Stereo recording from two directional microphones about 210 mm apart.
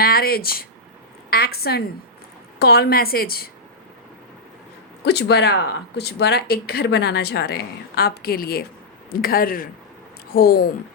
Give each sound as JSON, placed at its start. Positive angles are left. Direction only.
{"t": 0.0, "sound": "speech", "side_deg": 45}
{"t": 5.0, "sound": "speech", "side_deg": 55}